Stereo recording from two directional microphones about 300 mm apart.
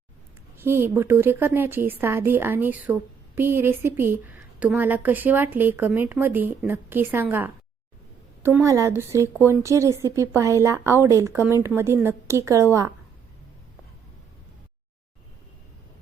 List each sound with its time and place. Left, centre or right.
0.5 s speech: centre